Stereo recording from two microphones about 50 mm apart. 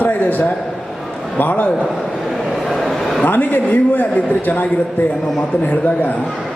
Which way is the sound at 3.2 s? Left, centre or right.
Left.